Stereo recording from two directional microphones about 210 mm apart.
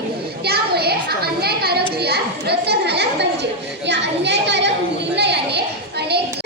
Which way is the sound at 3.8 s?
55° right (ahead or behind).